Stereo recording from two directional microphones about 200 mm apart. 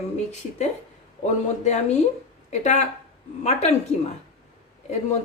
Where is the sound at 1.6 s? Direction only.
35° left (ahead or behind).